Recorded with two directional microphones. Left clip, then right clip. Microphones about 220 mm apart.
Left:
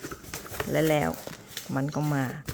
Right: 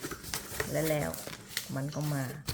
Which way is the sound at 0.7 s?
50° left (ahead or behind).